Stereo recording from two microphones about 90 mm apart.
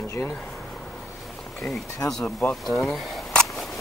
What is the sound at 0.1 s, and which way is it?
Speech, 30° left (ahead or behind).